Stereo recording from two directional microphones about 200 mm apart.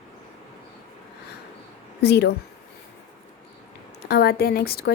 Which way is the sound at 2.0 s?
55° left (ahead or behind).